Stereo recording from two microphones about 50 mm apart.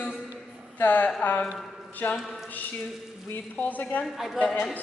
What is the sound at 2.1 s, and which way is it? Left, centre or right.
Speech, centre.